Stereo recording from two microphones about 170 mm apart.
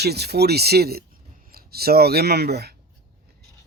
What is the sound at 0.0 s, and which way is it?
Speech, 70° right (ahead or behind).